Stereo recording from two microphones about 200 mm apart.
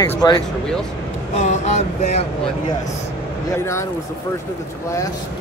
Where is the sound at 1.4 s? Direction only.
35° left (ahead or behind).